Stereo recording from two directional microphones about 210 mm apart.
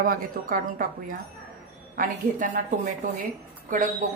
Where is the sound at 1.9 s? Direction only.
40° right (ahead or behind).